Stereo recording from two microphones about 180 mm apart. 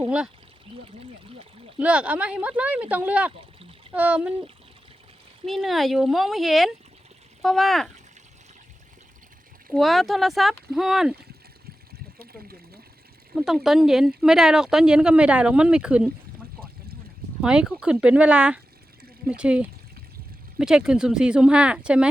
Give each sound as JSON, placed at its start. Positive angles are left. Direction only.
{"t": 0.9, "sound": "a sound", "side_deg": -35}
{"t": 1.8, "sound": "speech", "side_deg": -5}
{"t": 5.5, "sound": "speech", "side_deg": 0}
{"t": 9.6, "sound": "speech", "side_deg": 0}
{"t": 13.3, "sound": "speech", "side_deg": 0}
{"t": 17.4, "sound": "speech", "side_deg": -5}